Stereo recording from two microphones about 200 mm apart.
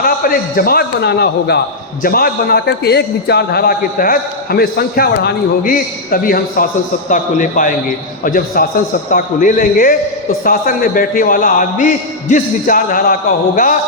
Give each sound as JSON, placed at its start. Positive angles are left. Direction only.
{"t": 0.0, "sound": "a man's voice", "side_deg": 45}